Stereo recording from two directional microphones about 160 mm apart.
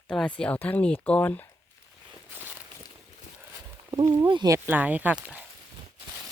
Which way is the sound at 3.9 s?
20° right (ahead or behind).